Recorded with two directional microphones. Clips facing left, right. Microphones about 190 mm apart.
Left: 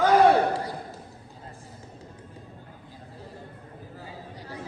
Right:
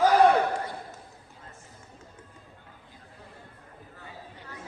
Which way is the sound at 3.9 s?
35° left (ahead or behind).